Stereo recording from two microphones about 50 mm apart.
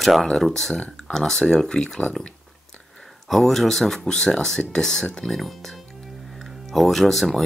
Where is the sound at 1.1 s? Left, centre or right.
Centre.